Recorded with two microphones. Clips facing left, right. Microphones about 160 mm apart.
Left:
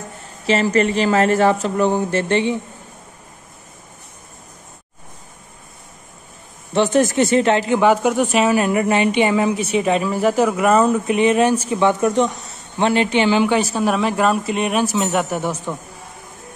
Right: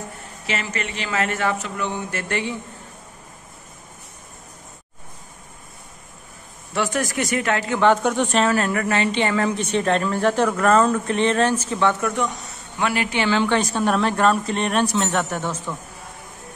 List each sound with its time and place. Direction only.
0.5 s speech: 35° left (ahead or behind)
6.7 s speech: 25° left (ahead or behind)
7.9 s a woman's voice: 5° left (ahead or behind)